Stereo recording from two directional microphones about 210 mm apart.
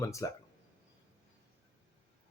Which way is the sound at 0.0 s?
15° left (ahead or behind).